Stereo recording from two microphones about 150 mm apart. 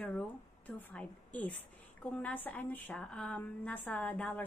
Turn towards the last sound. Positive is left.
turn(degrees=10)  # may be behind; listen again after turning